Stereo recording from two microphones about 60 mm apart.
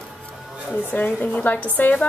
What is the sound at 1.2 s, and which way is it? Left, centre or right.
Speech, left.